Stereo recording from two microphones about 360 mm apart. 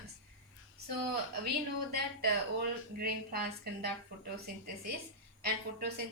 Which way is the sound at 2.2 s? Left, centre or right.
Right.